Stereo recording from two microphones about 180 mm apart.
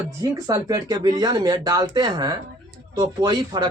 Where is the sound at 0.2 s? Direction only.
20° right (ahead or behind).